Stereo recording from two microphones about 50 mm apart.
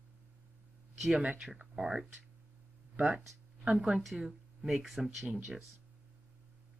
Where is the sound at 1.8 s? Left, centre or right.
Centre.